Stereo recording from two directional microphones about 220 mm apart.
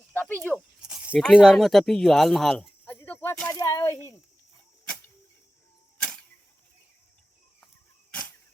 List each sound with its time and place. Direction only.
0.2 s speech: 10° left (ahead or behind)
0.8 s speech: 5° right (ahead or behind); by 4.1 s 15° left (ahead or behind)